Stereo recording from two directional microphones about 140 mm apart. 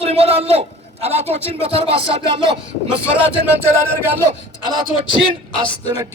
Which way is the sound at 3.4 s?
15° right (ahead or behind).